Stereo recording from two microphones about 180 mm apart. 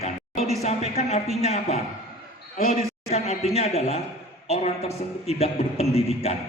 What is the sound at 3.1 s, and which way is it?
A man's voice, 35° left (ahead or behind).